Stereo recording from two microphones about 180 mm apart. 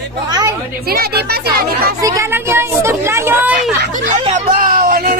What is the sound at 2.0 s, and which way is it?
Speech, 20° right (ahead or behind).